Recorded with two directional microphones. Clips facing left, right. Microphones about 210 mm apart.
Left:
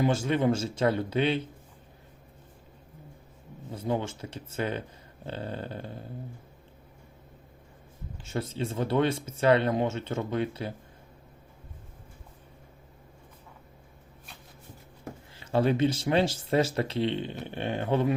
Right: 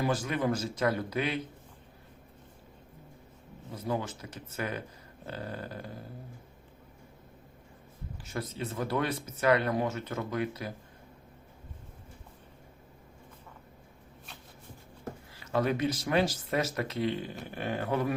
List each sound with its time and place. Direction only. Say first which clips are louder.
0.0 s speech: left 5 dB; 25° left (ahead or behind)
3.7 s speech: left 3 dB; 25° left (ahead or behind)
8.2 s speech: left 4 dB; 25° left (ahead or behind)
15.5 s speech: left 4 dB; 30° left (ahead or behind)